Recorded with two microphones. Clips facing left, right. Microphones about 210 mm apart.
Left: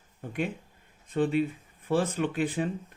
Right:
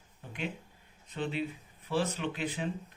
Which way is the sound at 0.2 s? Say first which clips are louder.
Left 7 dB; 50° left (ahead or behind).